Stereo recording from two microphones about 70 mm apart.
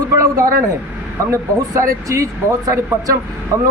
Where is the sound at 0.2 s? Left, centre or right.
Right.